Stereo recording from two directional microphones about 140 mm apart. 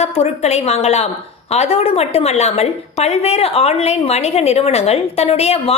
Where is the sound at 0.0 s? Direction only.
50° left (ahead or behind).